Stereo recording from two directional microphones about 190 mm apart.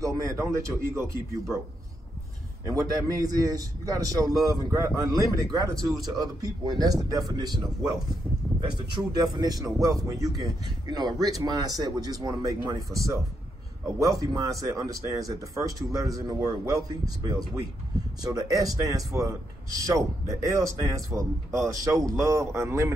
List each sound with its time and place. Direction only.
0.0 s speech: 15° right (ahead or behind)
2.6 s a man's voice: 15° right (ahead or behind)